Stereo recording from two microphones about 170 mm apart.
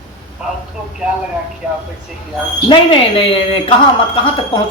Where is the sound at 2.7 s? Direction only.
30° left (ahead or behind).